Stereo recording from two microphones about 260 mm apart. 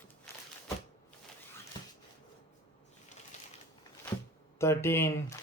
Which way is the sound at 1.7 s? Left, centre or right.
Centre.